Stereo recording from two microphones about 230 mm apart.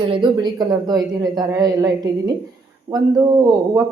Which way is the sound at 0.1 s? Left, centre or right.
Centre.